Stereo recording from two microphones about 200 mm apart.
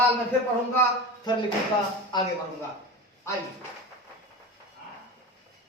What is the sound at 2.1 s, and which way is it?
Speech, 20° left (ahead or behind).